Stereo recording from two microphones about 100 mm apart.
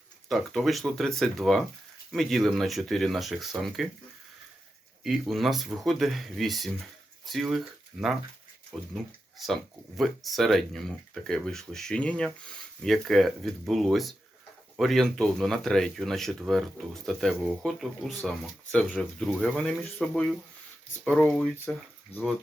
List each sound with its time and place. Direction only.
0.3 s speech: centre (ahead or behind)
5.0 s speech: centre (ahead or behind)
8.7 s speech: centre (ahead or behind)
10.0 s speech: centre (ahead or behind)
22.1 s speech: 80° left